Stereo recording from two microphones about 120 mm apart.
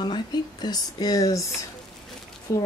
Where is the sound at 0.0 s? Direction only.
35° left (ahead or behind).